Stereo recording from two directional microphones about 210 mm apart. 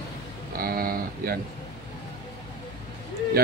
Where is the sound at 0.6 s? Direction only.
45° right (ahead or behind).